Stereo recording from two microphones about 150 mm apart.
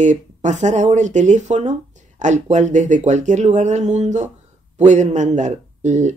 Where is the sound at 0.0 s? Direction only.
55° right (ahead or behind).